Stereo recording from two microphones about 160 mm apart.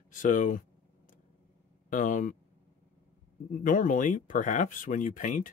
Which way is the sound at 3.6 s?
55° left (ahead or behind).